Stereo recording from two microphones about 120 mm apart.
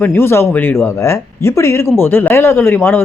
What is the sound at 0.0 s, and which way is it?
A man's voice, 15° left (ahead or behind).